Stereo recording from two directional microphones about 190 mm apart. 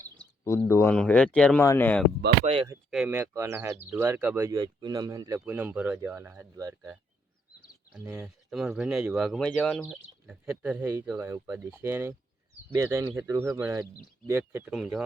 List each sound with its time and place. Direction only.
0.7 s speech: 10° left (ahead or behind)
2.4 s speech: 30° right (ahead or behind)
2.9 s speech: 5° right (ahead or behind)
8.0 s speech: 10° right (ahead or behind)